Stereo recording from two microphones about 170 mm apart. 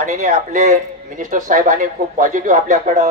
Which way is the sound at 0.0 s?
50° right (ahead or behind).